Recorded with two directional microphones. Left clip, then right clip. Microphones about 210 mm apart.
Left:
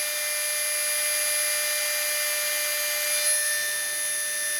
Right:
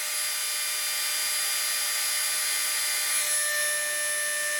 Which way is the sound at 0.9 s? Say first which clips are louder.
Left 2 dB; 25° left (ahead or behind).